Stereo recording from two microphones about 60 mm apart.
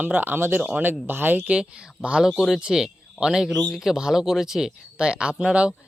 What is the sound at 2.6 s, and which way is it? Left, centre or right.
Speech, centre.